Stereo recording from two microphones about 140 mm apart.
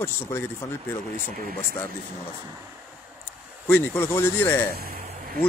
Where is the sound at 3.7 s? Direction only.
15° left (ahead or behind).